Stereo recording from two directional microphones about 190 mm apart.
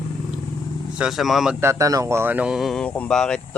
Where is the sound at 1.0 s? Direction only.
Centre (ahead or behind).